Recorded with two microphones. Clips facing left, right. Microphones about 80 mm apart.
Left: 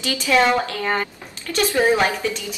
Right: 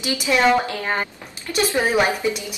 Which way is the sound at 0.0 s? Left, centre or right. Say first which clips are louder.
Left 1 dB; centre.